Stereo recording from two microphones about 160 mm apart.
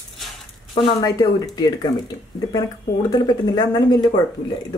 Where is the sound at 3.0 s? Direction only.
25° left (ahead or behind).